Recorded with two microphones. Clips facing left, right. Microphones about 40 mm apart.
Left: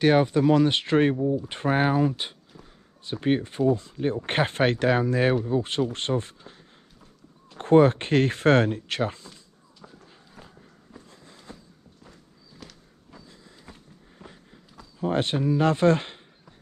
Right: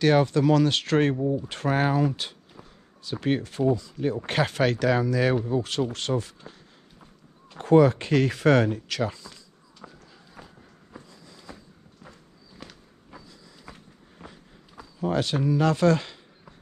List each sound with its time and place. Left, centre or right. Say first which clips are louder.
0.0 s speech: left 1 dB; centre
1.1 s speech: left 1 dB; centre
1.5 s speech: left 1 dB; left
2.5 s a sound: right 1 dB; centre
3.2 s speech: left 2 dB; centre
3.7 s speech: even; left
7.5 s speech: left 1 dB; left
9.8 s a sound: right 2 dB; right
10.4 s walk: right 2 dB; centre
12.5 s walk: right 2 dB; centre
14.2 s walk: right 1 dB; centre
15.0 s speech: even; left